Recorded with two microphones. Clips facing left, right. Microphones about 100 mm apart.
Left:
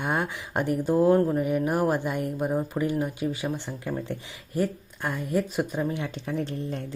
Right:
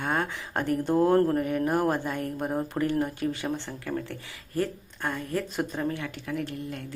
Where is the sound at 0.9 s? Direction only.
5° left (ahead or behind).